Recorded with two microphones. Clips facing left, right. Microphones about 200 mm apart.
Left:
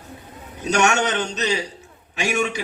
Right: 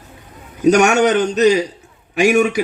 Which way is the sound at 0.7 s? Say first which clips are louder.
Right 8 dB; 40° right (ahead or behind).